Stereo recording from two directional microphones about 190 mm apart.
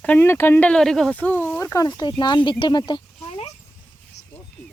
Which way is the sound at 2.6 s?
25° left (ahead or behind).